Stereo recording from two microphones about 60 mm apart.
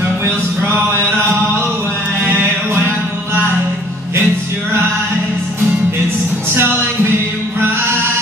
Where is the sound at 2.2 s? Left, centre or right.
Right.